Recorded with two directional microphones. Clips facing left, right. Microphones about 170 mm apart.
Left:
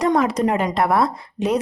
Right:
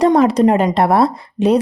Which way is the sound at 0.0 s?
30° right (ahead or behind).